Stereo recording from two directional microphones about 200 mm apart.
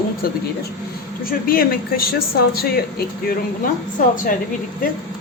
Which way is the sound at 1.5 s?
50° left (ahead or behind).